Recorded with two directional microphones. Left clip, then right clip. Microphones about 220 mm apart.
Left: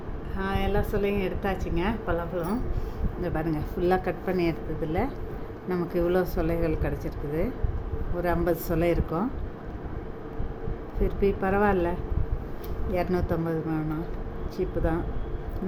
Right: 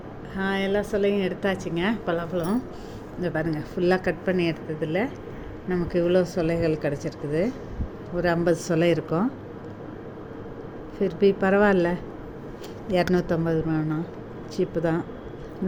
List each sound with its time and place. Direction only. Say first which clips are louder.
0.3 s a woman's voice: right 3 dB; 15° right (ahead or behind)
11.0 s a woman's voice: right 5 dB; 15° right (ahead or behind)